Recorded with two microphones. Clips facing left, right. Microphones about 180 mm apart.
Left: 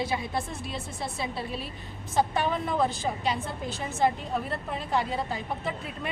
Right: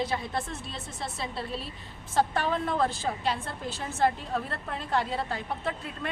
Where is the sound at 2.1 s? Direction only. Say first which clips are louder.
Even; 5° left (ahead or behind).